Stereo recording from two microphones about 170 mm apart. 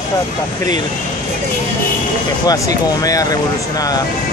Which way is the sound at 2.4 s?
20° left (ahead or behind).